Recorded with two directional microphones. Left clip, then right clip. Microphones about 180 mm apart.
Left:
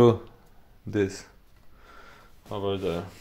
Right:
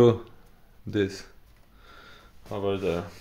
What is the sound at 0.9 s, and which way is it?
Speech, 5° left (ahead or behind).